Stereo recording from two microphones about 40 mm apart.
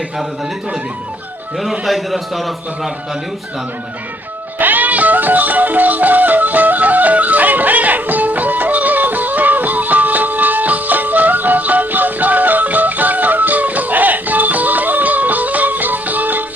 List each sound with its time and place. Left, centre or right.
1.8 s a man's voice: centre
4.5 s music: right